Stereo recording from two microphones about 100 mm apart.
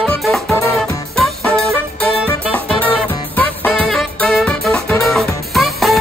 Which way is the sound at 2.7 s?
15° left (ahead or behind).